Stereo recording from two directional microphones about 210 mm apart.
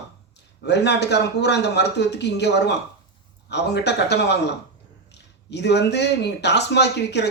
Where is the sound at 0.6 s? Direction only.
55° left (ahead or behind).